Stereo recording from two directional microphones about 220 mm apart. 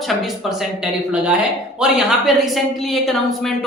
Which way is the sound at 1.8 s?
Centre (ahead or behind).